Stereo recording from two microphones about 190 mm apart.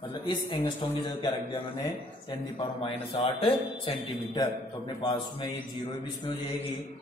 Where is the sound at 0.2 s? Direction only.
25° left (ahead or behind).